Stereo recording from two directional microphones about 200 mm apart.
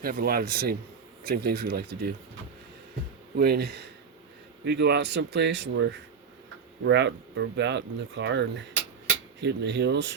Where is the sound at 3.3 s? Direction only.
50° right (ahead or behind).